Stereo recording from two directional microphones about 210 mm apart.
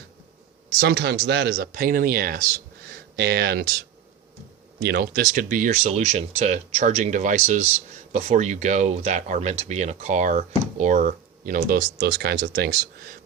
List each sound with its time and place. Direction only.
0.8 s speech: 55° right (ahead or behind)
4.8 s speech: 50° right (ahead or behind)